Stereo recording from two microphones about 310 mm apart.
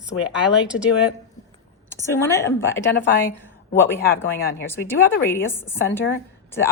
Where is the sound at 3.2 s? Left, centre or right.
Centre.